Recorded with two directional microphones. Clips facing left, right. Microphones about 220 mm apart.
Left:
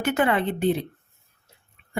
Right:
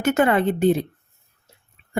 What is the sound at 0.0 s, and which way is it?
Speech, 45° right (ahead or behind).